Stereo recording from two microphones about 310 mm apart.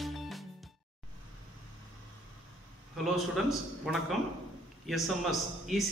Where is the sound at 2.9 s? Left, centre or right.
Centre.